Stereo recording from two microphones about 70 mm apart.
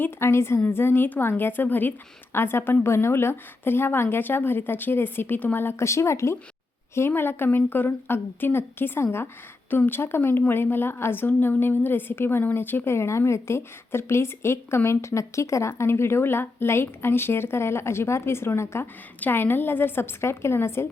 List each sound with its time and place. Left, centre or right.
0.0 s a woman's voice: left